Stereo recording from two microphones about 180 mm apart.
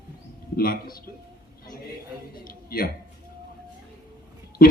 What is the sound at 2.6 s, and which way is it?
Speech, 55° left (ahead or behind).